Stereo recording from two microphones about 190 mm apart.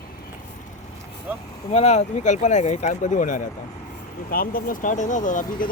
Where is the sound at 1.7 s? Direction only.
35° left (ahead or behind).